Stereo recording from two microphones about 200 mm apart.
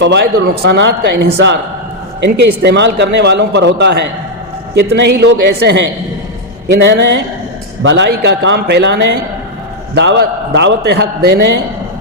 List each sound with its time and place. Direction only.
0.0 s a man's voice: 60° right (ahead or behind)